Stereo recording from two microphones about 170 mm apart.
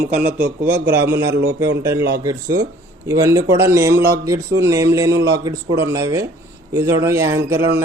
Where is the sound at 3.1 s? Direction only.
20° right (ahead or behind).